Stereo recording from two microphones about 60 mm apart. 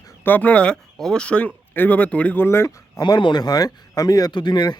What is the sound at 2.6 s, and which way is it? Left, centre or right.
A man's voice, left.